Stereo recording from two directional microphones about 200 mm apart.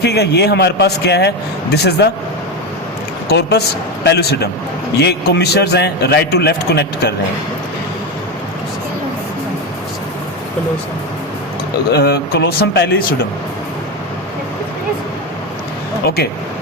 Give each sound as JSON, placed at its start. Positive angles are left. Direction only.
{"t": 0.0, "sound": "a man's voice", "side_deg": 55}
{"t": 3.2, "sound": "a man's voice", "side_deg": 55}
{"t": 11.9, "sound": "speech", "side_deg": 50}
{"t": 16.0, "sound": "speech", "side_deg": 55}